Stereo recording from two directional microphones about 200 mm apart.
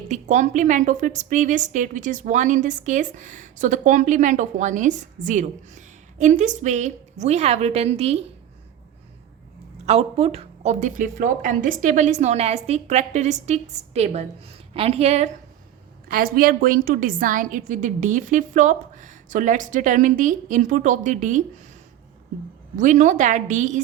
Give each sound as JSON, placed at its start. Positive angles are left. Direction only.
{"t": 0.1, "sound": "a woman's voice", "side_deg": -35}
{"t": 9.8, "sound": "a woman's voice", "side_deg": -30}
{"t": 16.0, "sound": "a woman's voice", "side_deg": -45}
{"t": 22.7, "sound": "a woman's voice", "side_deg": -40}